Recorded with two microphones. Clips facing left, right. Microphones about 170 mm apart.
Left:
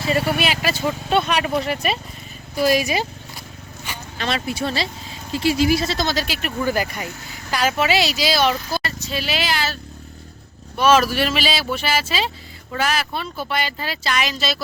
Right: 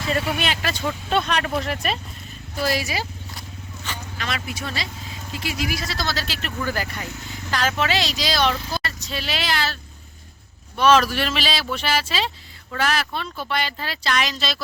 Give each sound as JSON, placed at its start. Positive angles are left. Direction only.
{"t": 0.3, "sound": "speech", "side_deg": 5}
{"t": 2.6, "sound": "speech", "side_deg": 15}
{"t": 3.9, "sound": "a sound", "side_deg": 10}
{"t": 4.2, "sound": "speech", "side_deg": 30}
{"t": 10.8, "sound": "speech", "side_deg": 5}